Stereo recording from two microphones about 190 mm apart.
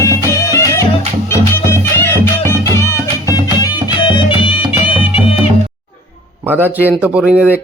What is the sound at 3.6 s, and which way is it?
Music, 25° left (ahead or behind).